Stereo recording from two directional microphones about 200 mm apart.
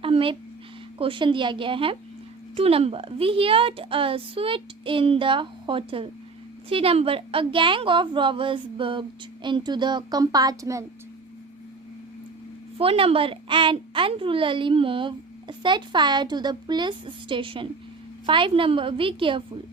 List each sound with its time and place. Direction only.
0.0 s a sound: 25° right (ahead or behind)
0.9 s a woman's voice: 25° right (ahead or behind)
12.7 s a woman's voice: 30° right (ahead or behind)